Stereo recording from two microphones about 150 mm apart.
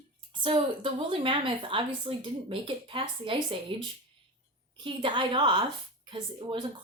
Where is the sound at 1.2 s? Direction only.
35° right (ahead or behind).